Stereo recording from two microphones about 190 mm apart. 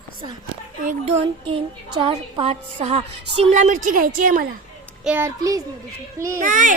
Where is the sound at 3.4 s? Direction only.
40° right (ahead or behind).